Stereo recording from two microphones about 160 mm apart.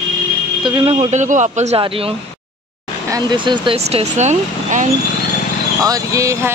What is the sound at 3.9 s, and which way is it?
Speech, 45° right (ahead or behind).